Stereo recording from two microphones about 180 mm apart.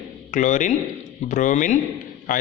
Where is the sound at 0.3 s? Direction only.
45° left (ahead or behind).